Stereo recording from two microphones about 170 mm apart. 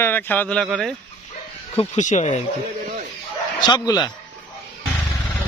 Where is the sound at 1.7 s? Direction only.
40° left (ahead or behind).